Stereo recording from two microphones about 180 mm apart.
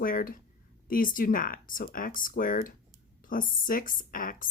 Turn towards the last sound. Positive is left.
turn(degrees=50)  # may be behind; listen again after turning